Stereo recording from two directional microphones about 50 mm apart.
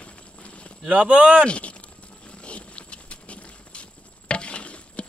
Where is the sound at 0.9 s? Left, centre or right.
Right.